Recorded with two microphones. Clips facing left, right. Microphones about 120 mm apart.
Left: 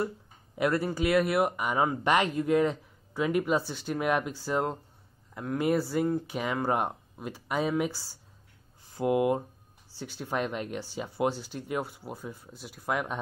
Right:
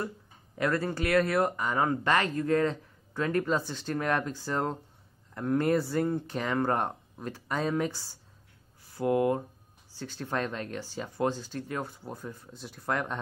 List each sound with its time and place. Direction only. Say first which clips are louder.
0.6 s speech: left 2 dB; 15° left (ahead or behind)